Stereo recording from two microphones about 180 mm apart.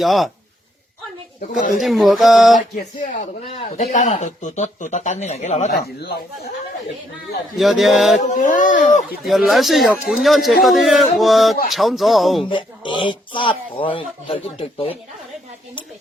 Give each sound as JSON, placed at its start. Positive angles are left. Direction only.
{"t": 0.0, "sound": "speech", "side_deg": 0}
{"t": 1.4, "sound": "speech", "side_deg": 45}
{"t": 1.8, "sound": "speech", "side_deg": 0}
{"t": 2.7, "sound": "speech", "side_deg": 50}
{"t": 3.4, "sound": "speech", "side_deg": 35}
{"t": 7.6, "sound": "speech", "side_deg": 0}
{"t": 8.2, "sound": "speech", "side_deg": 45}
{"t": 9.2, "sound": "speech", "side_deg": 0}
{"t": 12.5, "sound": "speech", "side_deg": 25}